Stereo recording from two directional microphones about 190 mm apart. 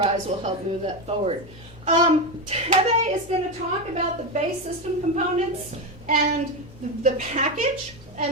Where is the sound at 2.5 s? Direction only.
35° right (ahead or behind).